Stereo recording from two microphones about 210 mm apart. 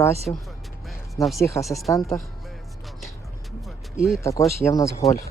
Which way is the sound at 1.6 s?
Centre (ahead or behind).